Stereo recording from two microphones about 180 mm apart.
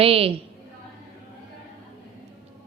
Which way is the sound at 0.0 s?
30° right (ahead or behind).